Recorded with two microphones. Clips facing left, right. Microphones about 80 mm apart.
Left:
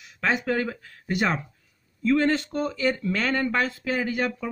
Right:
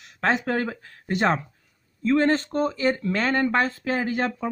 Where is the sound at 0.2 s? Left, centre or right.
Right.